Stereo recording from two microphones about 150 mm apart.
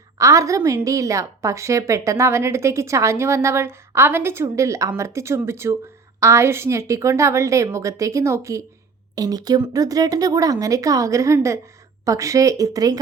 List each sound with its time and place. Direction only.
0.2 s a woman's voice: 20° right (ahead or behind)